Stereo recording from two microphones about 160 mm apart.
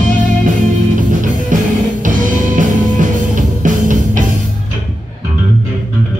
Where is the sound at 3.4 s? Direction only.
55° right (ahead or behind).